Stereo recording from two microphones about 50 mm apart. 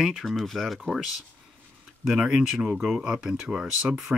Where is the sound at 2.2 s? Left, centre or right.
Centre.